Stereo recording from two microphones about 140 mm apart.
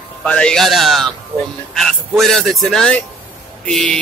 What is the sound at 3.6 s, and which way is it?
Speech, 5° left (ahead or behind).